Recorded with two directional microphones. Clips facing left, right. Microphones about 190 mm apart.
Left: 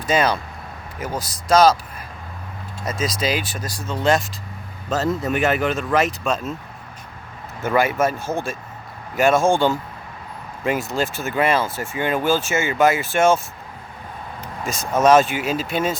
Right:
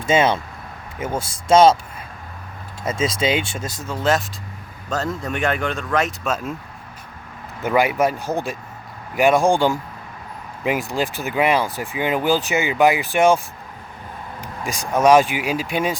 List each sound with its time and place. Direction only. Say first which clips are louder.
0.0 s speech: right 2 dB; 25° right (ahead or behind)
2.8 s speech: right 3 dB; 25° right (ahead or behind)
3.8 s speech: left 1 dB; centre (ahead or behind)
7.6 s speech: right 1 dB; 15° right (ahead or behind)
14.4 s speech: even; 15° right (ahead or behind)